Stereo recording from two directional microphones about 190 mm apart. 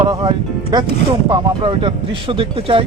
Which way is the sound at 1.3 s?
25° right (ahead or behind).